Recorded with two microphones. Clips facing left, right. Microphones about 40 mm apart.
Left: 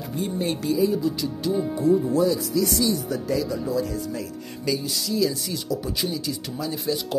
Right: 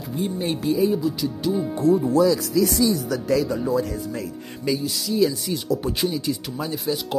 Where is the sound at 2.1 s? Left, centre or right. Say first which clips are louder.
Right 3 dB; right.